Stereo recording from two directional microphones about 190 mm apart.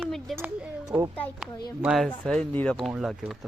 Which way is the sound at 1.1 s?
5° left (ahead or behind).